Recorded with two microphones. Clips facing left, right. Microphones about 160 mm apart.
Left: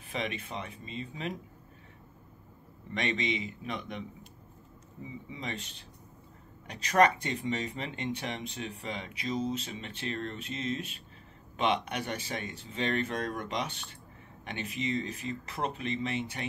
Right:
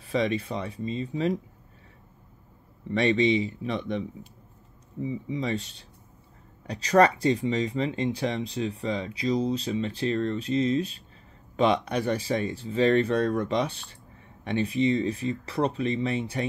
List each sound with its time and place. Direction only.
0.0 s speech: 35° right (ahead or behind)
2.9 s speech: 35° right (ahead or behind)
5.0 s speech: 35° right (ahead or behind)
6.7 s speech: 35° right (ahead or behind)